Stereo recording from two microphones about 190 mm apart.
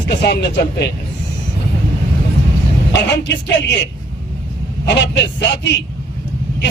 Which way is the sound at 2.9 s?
65° left (ahead or behind).